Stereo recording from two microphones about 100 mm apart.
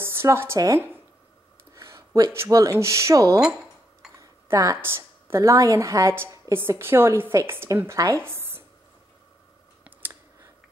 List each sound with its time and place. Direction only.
0.0 s speech: 25° right (ahead or behind)
1.8 s a woman's voice: 30° right (ahead or behind)
9.8 s a sound: 20° right (ahead or behind)